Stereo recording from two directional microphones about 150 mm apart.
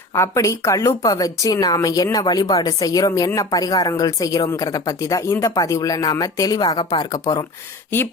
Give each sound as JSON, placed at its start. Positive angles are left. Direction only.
{"t": 0.1, "sound": "a woman's voice", "side_deg": 20}